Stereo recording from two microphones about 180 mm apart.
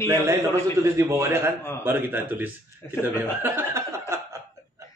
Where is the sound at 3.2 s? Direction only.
10° right (ahead or behind).